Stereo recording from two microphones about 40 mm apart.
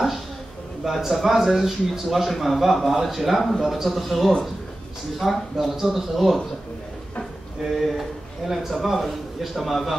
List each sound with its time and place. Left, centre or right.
0.8 s speech: centre
7.6 s speech: centre